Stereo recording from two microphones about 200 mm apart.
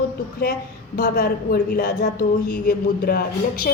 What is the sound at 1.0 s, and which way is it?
A woman's voice, 50° left (ahead or behind).